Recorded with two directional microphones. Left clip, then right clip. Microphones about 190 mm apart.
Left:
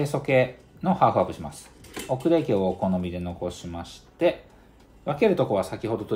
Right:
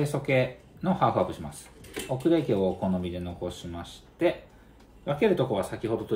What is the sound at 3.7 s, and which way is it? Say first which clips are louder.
Speech: left 3 dB; 35° left (ahead or behind).